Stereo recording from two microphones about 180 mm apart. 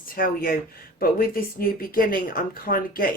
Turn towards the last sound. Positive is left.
turn(degrees=50)  # may be behind; listen again after turning